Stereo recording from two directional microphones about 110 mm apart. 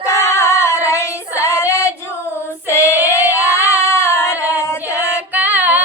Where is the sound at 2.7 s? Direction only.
25° left (ahead or behind).